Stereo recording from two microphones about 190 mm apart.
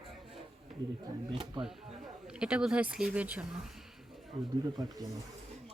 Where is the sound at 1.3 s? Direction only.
25° right (ahead or behind).